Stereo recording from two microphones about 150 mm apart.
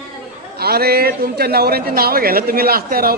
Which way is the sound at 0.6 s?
90° right.